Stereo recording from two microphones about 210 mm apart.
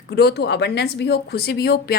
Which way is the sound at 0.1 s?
50° left (ahead or behind).